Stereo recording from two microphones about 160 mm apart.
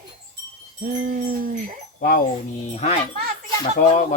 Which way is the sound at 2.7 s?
45° left (ahead or behind).